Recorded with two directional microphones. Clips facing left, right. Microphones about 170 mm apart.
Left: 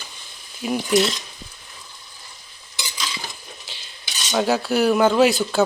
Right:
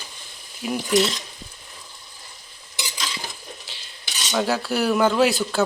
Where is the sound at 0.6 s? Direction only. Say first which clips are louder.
Left 2 dB; 5° left (ahead or behind).